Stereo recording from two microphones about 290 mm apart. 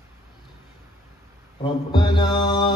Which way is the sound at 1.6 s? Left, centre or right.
Centre.